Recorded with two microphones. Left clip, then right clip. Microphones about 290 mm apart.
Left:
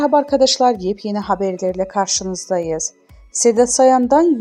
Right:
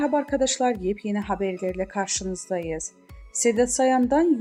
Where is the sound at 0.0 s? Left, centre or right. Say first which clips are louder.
Left 9 dB; left.